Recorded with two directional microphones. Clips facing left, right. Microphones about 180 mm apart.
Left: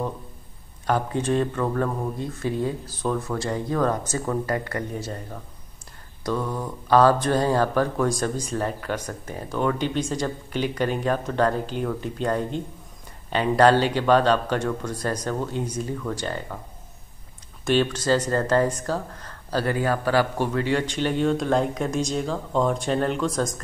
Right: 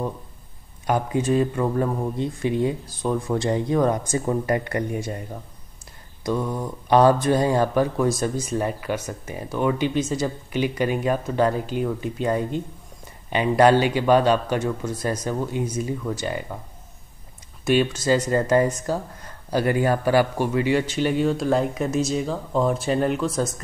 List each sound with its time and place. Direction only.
0.8 s speech: 10° right (ahead or behind)
17.6 s a man's voice: 10° right (ahead or behind)